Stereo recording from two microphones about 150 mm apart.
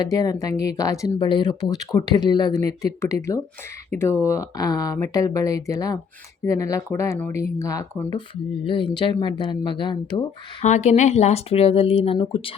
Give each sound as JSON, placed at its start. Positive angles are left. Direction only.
{"t": 0.0, "sound": "speech", "side_deg": 25}
{"t": 8.6, "sound": "speech", "side_deg": 35}
{"t": 10.6, "sound": "speech", "side_deg": 50}